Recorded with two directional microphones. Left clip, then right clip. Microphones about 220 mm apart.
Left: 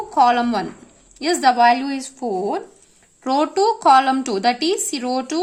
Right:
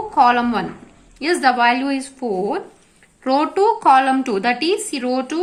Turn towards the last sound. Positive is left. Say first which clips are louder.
# right 1 dB
turn(degrees=50)  # may be behind; listen again after turning